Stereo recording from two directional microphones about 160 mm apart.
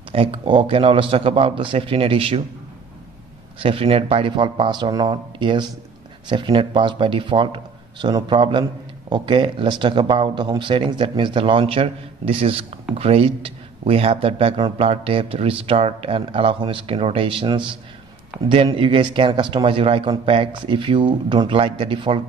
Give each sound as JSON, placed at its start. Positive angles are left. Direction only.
{"t": 0.1, "sound": "speech", "side_deg": -35}
{"t": 3.5, "sound": "speech", "side_deg": -35}